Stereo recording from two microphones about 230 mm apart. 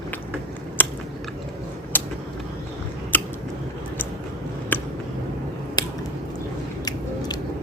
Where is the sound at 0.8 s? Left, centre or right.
Centre.